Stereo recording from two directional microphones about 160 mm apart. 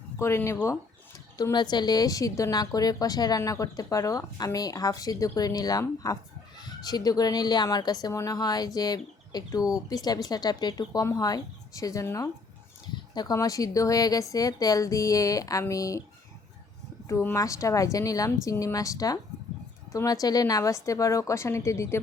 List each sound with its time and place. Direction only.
0.2 s a woman's voice: 15° left (ahead or behind)
17.1 s a woman's voice: 15° left (ahead or behind)